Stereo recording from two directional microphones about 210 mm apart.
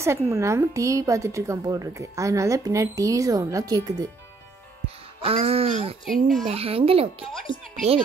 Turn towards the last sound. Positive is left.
turn(degrees=0)  # may be behind; listen again after turning